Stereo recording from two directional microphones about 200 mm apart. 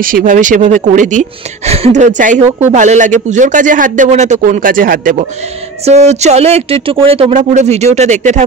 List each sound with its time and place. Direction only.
0.0 s speech: 40° right (ahead or behind)